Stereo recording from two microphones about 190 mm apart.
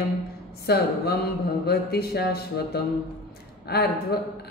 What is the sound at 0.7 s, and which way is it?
Mantra, 55° left (ahead or behind).